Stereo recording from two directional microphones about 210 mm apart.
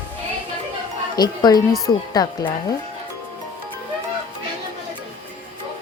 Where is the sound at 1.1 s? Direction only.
20° left (ahead or behind).